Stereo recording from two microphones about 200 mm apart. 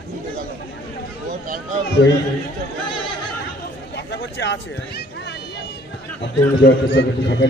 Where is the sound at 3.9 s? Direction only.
60° left (ahead or behind).